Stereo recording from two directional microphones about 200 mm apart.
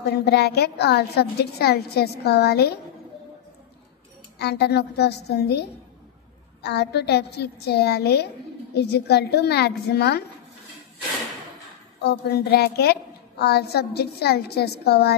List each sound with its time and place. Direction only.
0.0 s a woman's voice: 55° left (ahead or behind)
4.4 s a woman's voice: 55° left (ahead or behind)
12.0 s a woman's voice: 55° left (ahead or behind)